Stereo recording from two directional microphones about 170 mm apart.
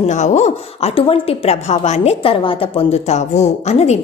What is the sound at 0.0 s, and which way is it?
A woman's voice, 45° left (ahead or behind).